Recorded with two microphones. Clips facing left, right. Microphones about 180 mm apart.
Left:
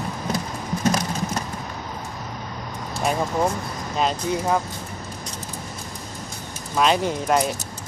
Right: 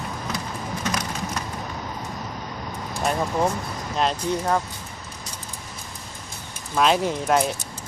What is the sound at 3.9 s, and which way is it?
Speech, 5° left (ahead or behind).